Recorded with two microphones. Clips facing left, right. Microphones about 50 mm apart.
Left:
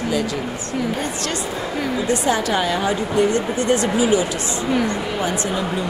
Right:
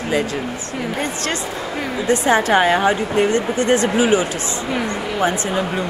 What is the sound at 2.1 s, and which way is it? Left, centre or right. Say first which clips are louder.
Speech: right 6 dB; right.